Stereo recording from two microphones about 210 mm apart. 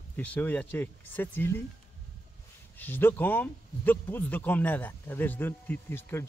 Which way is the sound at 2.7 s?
10° left (ahead or behind).